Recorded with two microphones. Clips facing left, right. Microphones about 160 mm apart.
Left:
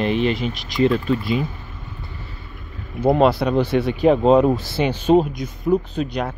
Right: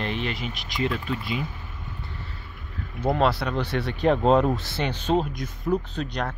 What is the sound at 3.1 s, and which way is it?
Speech, 15° left (ahead or behind).